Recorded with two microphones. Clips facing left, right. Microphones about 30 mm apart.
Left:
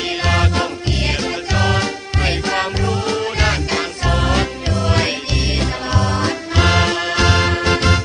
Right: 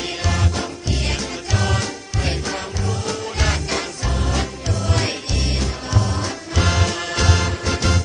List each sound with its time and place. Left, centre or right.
0.3 s music: left
1.5 s music: left
2.2 s music: left
2.9 s music: left
4.0 s music: left
4.4 s music: left
7.4 s music: left